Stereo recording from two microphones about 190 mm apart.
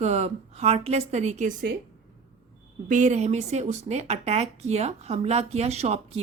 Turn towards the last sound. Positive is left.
turn(degrees=-35)  # may be behind; listen again after turning